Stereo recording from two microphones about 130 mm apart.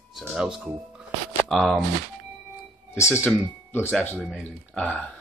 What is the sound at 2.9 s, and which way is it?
Speech, 20° left (ahead or behind).